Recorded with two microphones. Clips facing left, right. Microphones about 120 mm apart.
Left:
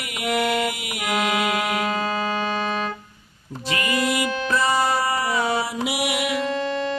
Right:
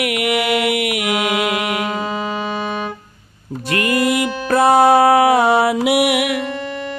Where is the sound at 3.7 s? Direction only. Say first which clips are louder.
Right 6 dB; 55° right (ahead or behind).